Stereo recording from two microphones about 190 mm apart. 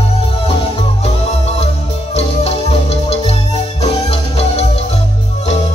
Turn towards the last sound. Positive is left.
turn(degrees=30)  # may be behind; listen again after turning